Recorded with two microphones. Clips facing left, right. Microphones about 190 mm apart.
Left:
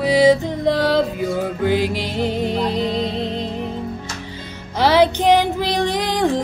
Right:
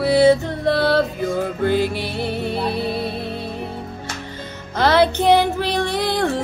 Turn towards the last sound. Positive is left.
turn(degrees=15)  # may be behind; listen again after turning